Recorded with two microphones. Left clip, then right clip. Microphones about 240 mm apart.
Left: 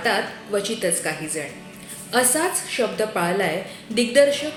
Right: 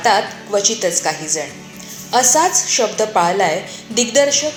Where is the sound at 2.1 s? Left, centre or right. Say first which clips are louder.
Right 7 dB; centre.